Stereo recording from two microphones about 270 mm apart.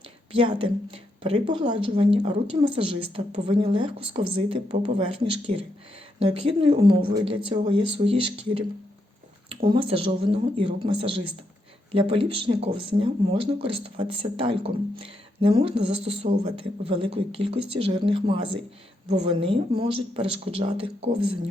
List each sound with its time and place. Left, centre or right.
0.3 s speech: centre
9.6 s speech: centre
15.8 s speech: right
16.0 s speech: centre